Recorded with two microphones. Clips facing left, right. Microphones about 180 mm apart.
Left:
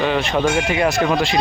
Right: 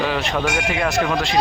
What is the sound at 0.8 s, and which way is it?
Speech, 30° left (ahead or behind).